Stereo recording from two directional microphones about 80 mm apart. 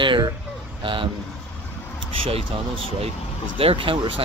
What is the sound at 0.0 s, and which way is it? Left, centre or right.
Speech, right.